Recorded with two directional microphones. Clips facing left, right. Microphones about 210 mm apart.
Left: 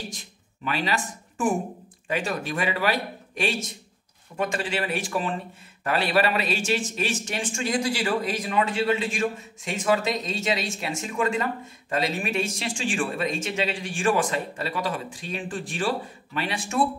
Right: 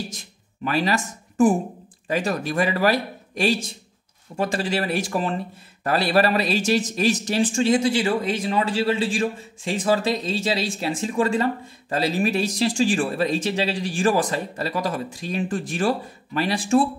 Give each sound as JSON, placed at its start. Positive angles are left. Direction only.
{"t": 0.7, "sound": "a man's voice", "side_deg": -45}